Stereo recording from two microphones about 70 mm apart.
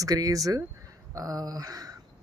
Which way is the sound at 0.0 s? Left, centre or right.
Right.